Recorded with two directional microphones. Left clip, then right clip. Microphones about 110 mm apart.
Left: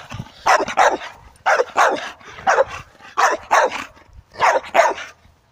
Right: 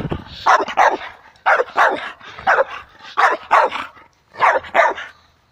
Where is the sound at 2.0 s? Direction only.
25° left (ahead or behind).